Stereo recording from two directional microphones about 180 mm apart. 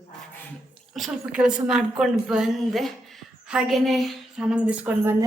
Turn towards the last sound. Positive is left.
turn(degrees=-15)  # may be behind; listen again after turning